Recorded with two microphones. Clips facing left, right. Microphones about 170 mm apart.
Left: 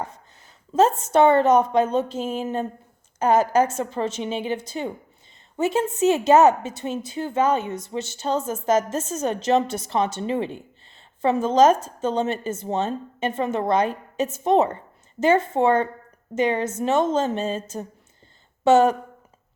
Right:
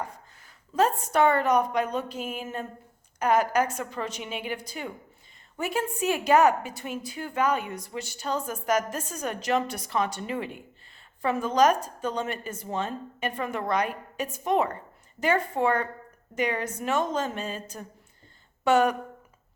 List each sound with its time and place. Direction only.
0.7 s a woman's voice: 25° left (ahead or behind)